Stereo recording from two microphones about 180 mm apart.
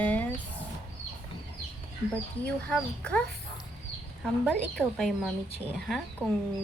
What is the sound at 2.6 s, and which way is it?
Speech, 5° left (ahead or behind).